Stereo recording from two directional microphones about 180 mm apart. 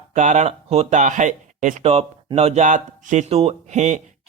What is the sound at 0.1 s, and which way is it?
Speech, 40° right (ahead or behind).